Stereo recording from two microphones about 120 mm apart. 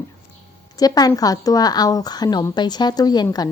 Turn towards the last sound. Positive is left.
turn(degrees=35)  # may be behind; listen again after turning